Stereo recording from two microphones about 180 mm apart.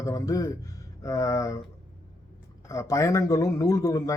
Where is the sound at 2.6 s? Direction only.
15° left (ahead or behind).